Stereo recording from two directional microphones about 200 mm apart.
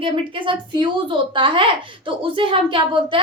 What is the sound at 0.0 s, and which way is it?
A woman's voice, 25° right (ahead or behind).